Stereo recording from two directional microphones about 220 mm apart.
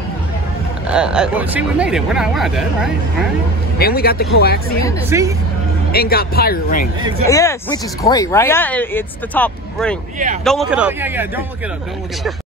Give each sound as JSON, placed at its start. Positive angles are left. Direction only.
{"t": 0.8, "sound": "speech", "side_deg": -5}
{"t": 3.7, "sound": "speech", "side_deg": 45}
{"t": 5.1, "sound": "speech", "side_deg": -10}
{"t": 5.9, "sound": "speech", "side_deg": 45}
{"t": 7.2, "sound": "speech", "side_deg": 15}
{"t": 10.1, "sound": "speech", "side_deg": -35}
{"t": 10.4, "sound": "speech", "side_deg": 0}